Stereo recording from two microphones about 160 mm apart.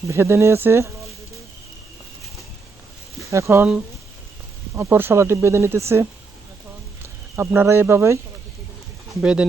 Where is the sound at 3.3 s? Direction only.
20° right (ahead or behind).